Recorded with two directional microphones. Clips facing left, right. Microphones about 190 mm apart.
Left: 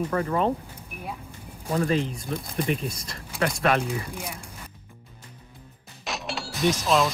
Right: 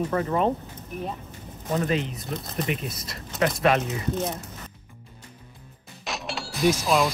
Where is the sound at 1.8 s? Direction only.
30° left (ahead or behind).